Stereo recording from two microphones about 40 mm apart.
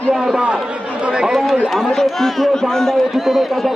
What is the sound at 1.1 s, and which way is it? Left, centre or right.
Speech, right.